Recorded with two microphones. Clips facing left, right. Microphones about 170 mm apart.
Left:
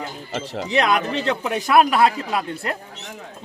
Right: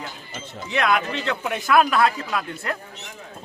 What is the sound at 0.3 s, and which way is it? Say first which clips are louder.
Speech: left 11 dB; 90° left.